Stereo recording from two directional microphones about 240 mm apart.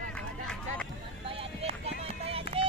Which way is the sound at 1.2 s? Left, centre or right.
Right.